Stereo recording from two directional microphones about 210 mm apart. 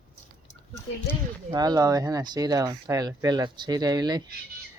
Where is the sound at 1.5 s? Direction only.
20° right (ahead or behind).